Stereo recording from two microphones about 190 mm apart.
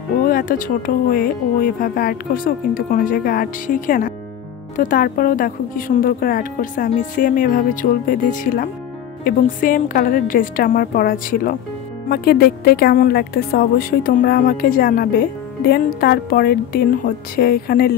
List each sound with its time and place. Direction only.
0.2 s speech: 50° left (ahead or behind)